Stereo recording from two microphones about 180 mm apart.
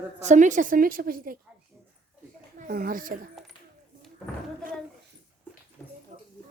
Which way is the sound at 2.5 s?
50° right (ahead or behind).